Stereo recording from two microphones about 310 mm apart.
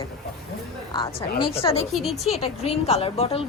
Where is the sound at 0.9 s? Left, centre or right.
Centre.